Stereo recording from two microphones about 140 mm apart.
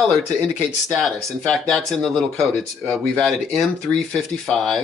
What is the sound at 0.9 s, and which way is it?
Speech, centre (ahead or behind).